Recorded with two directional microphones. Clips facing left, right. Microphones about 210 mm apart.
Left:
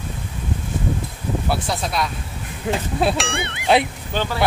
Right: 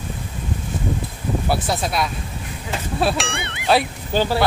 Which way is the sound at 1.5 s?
5° right (ahead or behind).